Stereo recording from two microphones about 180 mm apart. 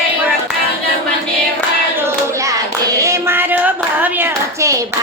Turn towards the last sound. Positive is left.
turn(degrees=-15)  # may be behind; listen again after turning